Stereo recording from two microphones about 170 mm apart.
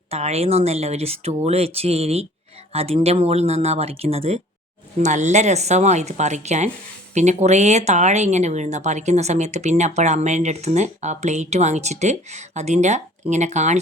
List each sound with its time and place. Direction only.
0.1 s speech: 40° right (ahead or behind)